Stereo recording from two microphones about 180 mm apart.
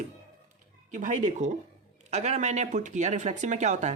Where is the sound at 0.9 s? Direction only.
45° right (ahead or behind).